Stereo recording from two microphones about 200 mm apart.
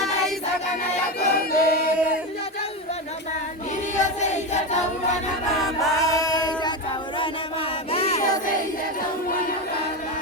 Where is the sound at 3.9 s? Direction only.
35° left (ahead or behind).